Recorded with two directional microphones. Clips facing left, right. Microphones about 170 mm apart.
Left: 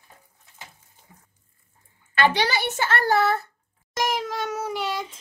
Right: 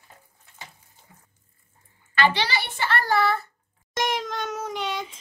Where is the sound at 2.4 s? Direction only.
45° left (ahead or behind).